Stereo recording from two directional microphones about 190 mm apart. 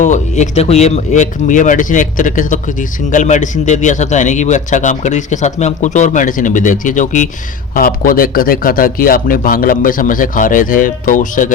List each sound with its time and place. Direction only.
0.0 s a man's voice: 40° left (ahead or behind)